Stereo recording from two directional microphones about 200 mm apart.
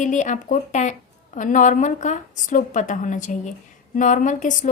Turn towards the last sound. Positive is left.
turn(degrees=40)  # may be behind; listen again after turning